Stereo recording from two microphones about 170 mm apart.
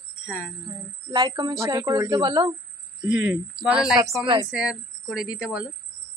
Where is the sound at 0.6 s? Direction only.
25° right (ahead or behind).